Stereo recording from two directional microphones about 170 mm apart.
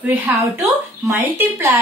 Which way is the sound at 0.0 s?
10° right (ahead or behind).